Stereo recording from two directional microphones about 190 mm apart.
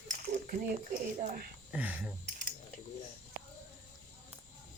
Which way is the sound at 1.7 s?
5° right (ahead or behind).